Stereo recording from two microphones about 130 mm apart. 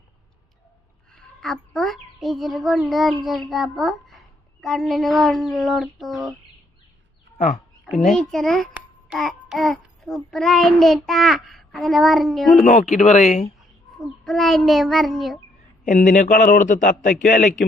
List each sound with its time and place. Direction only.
1.1 s a child's voice: 5° left (ahead or behind)
7.9 s a child's voice: centre (ahead or behind)
8.7 s child singing: 5° right (ahead or behind)
10.3 s a child's voice: 5° left (ahead or behind)
12.6 s speech: 70° left (ahead or behind)
14.0 s a child's voice: centre (ahead or behind)
15.8 s a man's voice: 85° left